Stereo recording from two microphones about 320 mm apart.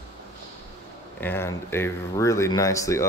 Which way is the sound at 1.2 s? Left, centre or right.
Centre.